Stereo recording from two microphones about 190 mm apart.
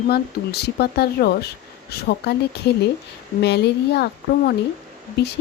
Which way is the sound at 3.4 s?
60° left (ahead or behind).